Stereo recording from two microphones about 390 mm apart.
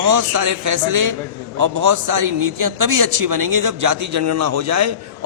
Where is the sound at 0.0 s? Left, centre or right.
Right.